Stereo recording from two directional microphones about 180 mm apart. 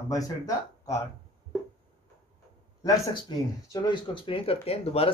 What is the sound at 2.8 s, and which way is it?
Speech, 20° left (ahead or behind).